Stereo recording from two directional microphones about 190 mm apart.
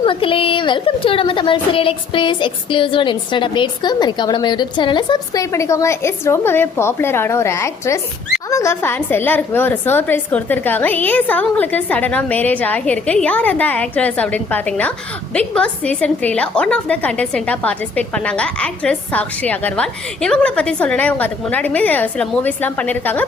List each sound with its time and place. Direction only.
0.0 s a woman's voice: 25° left (ahead or behind); by 23.2 s 10° left (ahead or behind)